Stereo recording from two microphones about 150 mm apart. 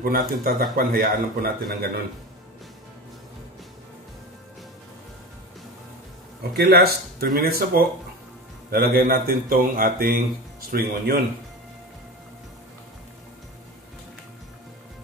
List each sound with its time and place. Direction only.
0.0 s speech: 85° right
6.6 s a man's voice: 90° right